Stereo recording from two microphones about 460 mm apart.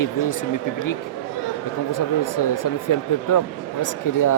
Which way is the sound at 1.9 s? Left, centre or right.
Left.